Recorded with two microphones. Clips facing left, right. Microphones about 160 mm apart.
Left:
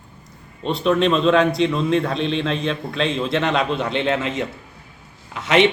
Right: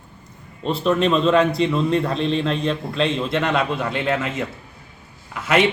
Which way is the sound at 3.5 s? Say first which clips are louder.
Left 1 dB; 25° left (ahead or behind).